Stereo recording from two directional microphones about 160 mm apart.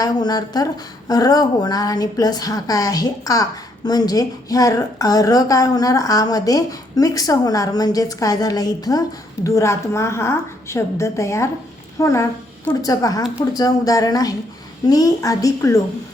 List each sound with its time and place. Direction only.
0.0 s a woman's voice: 25° left (ahead or behind)